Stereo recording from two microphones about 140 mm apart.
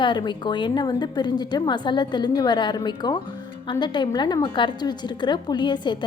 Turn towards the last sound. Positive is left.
turn(degrees=35)  # may be behind; listen again after turning